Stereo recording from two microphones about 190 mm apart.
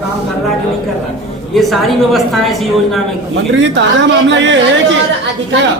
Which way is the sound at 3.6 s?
70° right (ahead or behind).